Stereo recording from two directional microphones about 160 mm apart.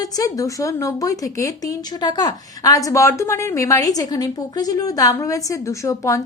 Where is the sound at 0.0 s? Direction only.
20° left (ahead or behind).